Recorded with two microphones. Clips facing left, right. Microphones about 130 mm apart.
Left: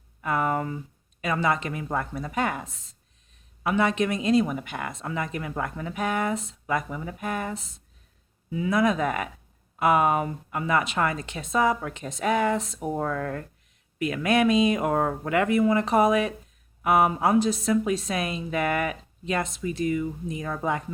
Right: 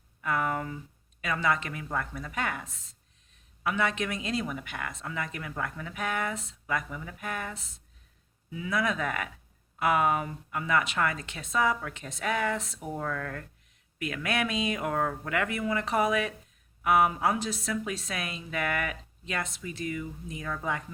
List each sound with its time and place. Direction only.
0.2 s speech: 30° left (ahead or behind)
12.8 s speech: 30° left (ahead or behind)